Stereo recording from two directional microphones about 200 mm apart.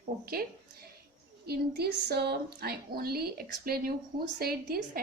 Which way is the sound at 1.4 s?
55° right (ahead or behind).